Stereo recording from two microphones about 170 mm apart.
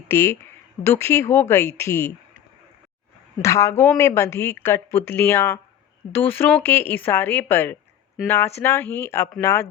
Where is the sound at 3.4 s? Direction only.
15° left (ahead or behind).